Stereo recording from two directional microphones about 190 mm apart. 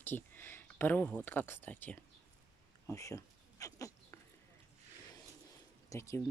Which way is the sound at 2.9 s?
15° left (ahead or behind).